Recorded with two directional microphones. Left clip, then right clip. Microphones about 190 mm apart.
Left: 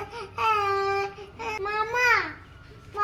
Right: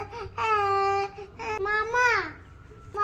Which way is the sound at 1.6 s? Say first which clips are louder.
Right 1 dB; 25° right (ahead or behind).